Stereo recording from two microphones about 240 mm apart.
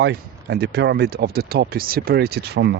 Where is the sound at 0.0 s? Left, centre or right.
Right.